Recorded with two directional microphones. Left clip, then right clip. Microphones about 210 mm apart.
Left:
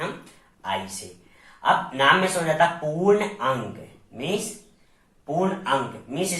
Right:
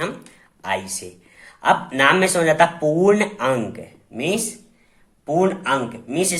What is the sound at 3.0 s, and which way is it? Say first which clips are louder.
Speech: left 1 dB; 50° right (ahead or behind).